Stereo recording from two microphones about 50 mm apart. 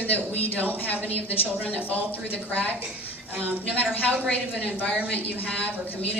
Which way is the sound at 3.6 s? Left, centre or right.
Left.